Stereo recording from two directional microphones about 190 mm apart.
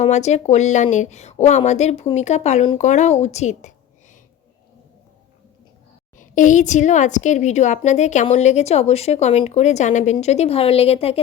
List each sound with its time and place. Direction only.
0.0 s a woman's voice: 35° left (ahead or behind)
6.1 s a woman's voice: 40° left (ahead or behind)